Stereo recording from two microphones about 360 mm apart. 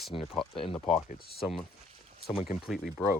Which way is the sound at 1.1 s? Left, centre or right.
Left.